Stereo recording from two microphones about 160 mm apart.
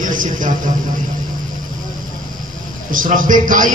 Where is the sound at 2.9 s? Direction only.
60° right (ahead or behind).